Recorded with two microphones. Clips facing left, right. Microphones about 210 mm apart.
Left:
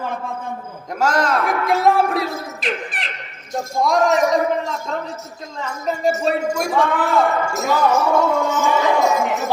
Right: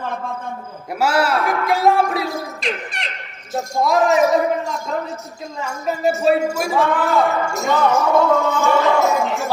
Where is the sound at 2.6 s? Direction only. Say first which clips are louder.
Even; centre (ahead or behind).